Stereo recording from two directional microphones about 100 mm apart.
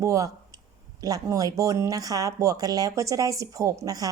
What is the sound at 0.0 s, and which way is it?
Speech, 30° right (ahead or behind).